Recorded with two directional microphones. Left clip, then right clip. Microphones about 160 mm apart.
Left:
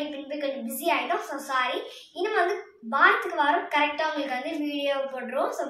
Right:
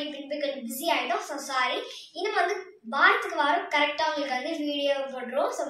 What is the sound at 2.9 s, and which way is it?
A woman's voice, centre (ahead or behind).